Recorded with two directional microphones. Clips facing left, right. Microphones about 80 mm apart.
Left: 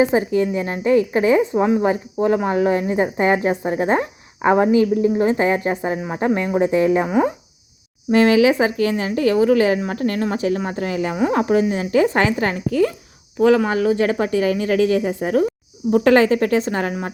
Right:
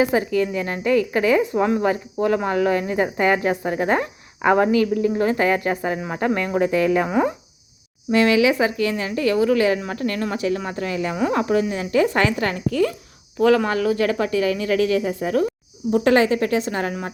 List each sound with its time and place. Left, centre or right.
0.0 s a woman's voice: left
8.1 s a woman's voice: left